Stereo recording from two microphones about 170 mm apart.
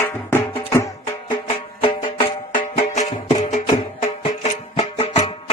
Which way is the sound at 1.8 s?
30° left (ahead or behind).